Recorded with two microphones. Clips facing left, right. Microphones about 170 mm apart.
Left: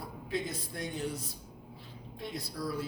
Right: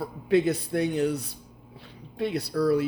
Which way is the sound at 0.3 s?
70° right (ahead or behind).